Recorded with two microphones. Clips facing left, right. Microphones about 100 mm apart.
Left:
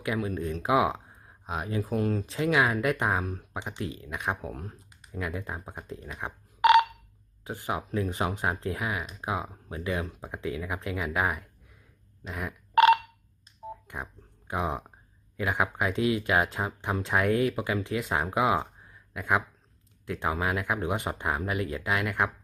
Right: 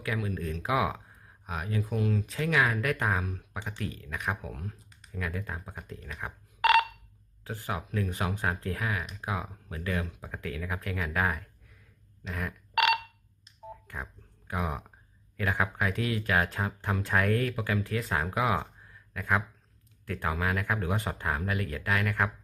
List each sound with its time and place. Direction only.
0.0 s speech: 30° left (ahead or behind)
2.3 s speech: 25° left (ahead or behind)
4.4 s speech: 35° left (ahead or behind)
5.2 s speech: 25° left (ahead or behind)
12.7 s a sound: 30° left (ahead or behind)
13.8 s a sound: 20° left (ahead or behind)
15.4 s speech: 15° left (ahead or behind)